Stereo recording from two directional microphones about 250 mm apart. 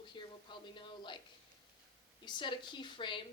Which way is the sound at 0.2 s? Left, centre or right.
Centre.